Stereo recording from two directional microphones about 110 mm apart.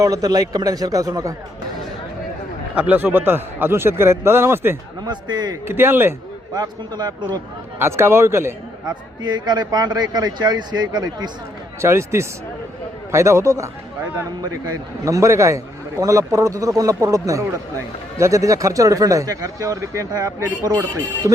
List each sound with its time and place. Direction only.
0.0 s a man's voice: 35° right (ahead or behind)
2.7 s a man's voice: 15° right (ahead or behind)
5.0 s a man's voice: 40° right (ahead or behind)
5.6 s a man's voice: 20° right (ahead or behind)
6.5 s a man's voice: 35° right (ahead or behind)
7.8 s a man's voice: 20° right (ahead or behind)
8.9 s a man's voice: 40° right (ahead or behind)
11.8 s a man's voice: 25° right (ahead or behind)